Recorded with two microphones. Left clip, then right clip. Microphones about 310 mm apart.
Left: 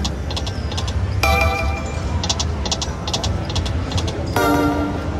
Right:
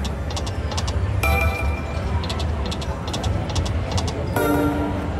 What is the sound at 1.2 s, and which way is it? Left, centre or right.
Music, centre.